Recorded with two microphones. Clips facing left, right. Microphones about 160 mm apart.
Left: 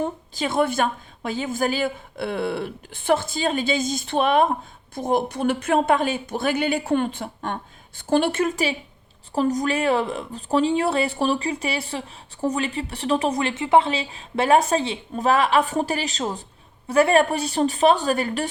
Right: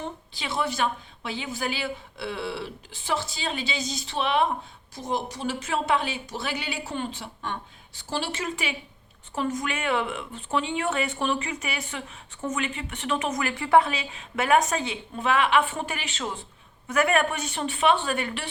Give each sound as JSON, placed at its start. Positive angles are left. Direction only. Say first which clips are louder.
{"t": 0.0, "sound": "a woman's voice", "louder": "left 9 dB", "side_deg": 45}
{"t": 9.3, "sound": "speech", "louder": "left 7 dB", "side_deg": 35}